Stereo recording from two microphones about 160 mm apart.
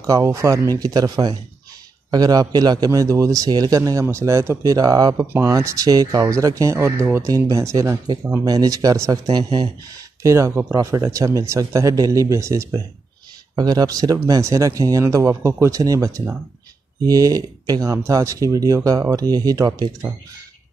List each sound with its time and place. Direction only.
0.0 s a man's voice: 20° right (ahead or behind)